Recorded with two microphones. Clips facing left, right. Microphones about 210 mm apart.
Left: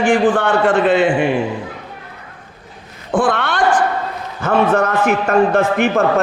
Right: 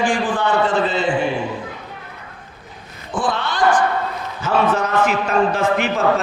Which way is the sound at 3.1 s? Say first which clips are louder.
Left 5 dB; 65° left (ahead or behind).